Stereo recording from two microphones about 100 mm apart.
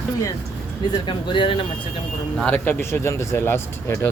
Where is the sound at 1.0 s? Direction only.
55° left (ahead or behind).